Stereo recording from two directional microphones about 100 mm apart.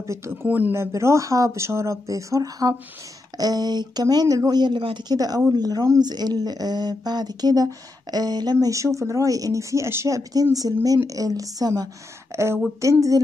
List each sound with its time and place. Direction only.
0.0 s speech: 30° right (ahead or behind)
0.7 s speech: 30° right (ahead or behind)